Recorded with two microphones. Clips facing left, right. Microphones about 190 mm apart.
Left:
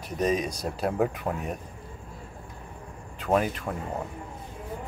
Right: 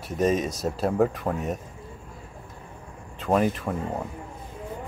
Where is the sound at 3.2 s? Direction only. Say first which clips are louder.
Right 2 dB; centre (ahead or behind).